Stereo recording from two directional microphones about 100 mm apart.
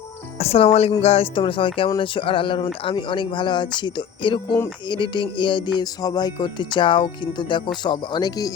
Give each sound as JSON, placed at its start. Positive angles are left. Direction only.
{"t": 0.3, "sound": "speech", "side_deg": 80}
{"t": 2.0, "sound": "a sound", "side_deg": 60}
{"t": 2.9, "sound": "music", "side_deg": 55}